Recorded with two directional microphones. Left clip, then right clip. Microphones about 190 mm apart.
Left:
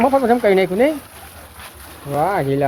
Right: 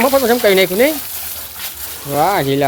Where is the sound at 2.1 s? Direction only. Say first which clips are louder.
Right 4 dB; 20° right (ahead or behind).